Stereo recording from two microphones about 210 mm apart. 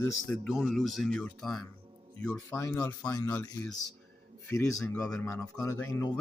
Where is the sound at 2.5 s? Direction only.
15° left (ahead or behind).